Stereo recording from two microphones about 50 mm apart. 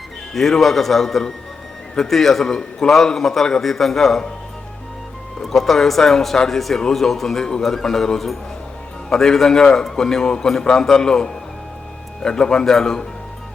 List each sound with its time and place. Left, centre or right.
0.3 s a man's voice: centre
5.4 s a man's voice: centre